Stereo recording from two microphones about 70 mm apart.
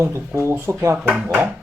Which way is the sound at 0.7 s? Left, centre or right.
Right.